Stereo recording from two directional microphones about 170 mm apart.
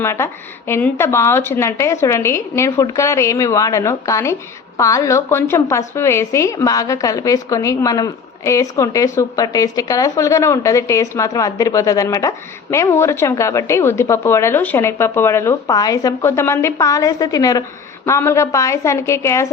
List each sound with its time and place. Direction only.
0.0 s a woman's voice: 15° left (ahead or behind)